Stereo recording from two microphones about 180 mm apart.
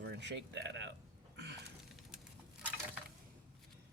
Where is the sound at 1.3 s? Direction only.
70° right (ahead or behind).